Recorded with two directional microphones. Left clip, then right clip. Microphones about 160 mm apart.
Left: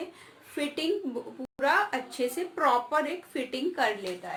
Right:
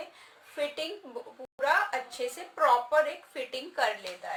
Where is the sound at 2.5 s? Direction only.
20° left (ahead or behind).